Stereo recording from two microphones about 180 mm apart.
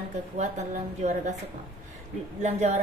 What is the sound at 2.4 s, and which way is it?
Speech, 40° right (ahead or behind).